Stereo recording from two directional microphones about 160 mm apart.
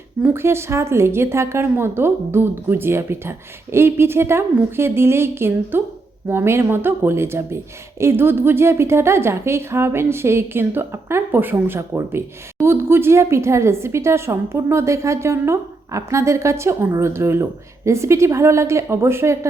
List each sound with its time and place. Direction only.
0.2 s speech: 15° right (ahead or behind)